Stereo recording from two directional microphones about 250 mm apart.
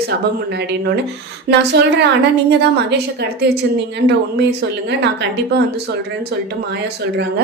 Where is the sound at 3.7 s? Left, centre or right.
Right.